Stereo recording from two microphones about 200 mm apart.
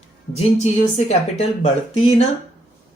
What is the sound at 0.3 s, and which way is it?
Speech, 35° left (ahead or behind).